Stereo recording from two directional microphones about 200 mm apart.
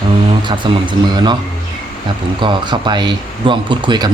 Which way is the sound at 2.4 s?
25° right (ahead or behind).